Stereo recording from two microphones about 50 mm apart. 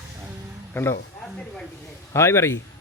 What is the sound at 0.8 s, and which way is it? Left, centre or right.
Speech, left.